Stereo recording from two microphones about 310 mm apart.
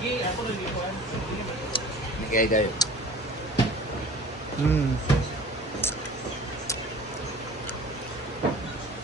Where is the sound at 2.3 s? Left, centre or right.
Left.